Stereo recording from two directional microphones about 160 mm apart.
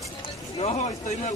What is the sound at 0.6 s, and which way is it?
Speech, 45° left (ahead or behind).